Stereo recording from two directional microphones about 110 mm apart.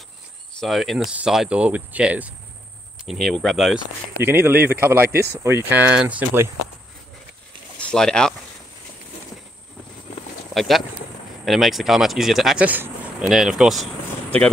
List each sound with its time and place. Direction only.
0.6 s speech: centre (ahead or behind)
1.1 s cricket: 5° right (ahead or behind)
3.1 s speech: centre (ahead or behind)
4.2 s speech: 20° right (ahead or behind)
7.8 s speech: 5° left (ahead or behind)
10.5 s speech: centre (ahead or behind)
12.6 s speech: 15° right (ahead or behind)
13.3 s speech: 5° right (ahead or behind)